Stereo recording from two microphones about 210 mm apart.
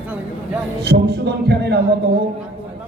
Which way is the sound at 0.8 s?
50° right (ahead or behind).